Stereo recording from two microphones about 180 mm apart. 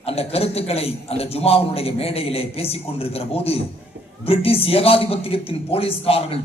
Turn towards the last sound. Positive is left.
turn(degrees=30)  # may be behind; listen again after turning